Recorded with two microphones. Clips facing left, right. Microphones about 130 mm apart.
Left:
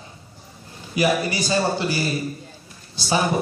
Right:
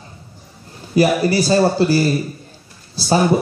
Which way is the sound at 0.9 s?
35° right (ahead or behind).